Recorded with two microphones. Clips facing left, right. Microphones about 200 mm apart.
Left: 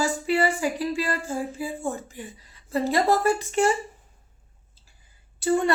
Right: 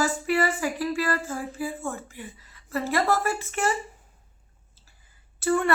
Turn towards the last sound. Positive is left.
turn(degrees=20)  # may be behind; listen again after turning